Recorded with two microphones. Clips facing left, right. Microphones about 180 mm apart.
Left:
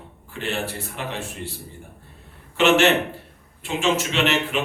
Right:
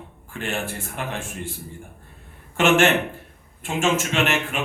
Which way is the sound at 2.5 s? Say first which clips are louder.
Left 1 dB; 50° right (ahead or behind).